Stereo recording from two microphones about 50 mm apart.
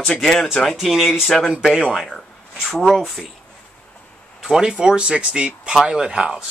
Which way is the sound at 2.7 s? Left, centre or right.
Centre.